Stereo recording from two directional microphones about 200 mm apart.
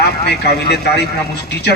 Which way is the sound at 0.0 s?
55° left (ahead or behind).